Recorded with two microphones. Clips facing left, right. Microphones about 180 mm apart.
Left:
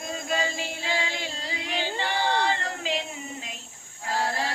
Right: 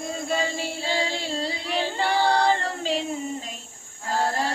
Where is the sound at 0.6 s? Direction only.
35° right (ahead or behind).